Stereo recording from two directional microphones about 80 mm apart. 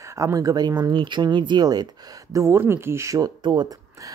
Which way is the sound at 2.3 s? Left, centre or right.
Right.